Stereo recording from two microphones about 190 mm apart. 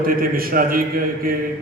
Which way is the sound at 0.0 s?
50° right (ahead or behind).